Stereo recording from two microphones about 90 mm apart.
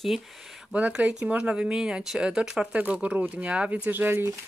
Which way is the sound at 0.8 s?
15° right (ahead or behind).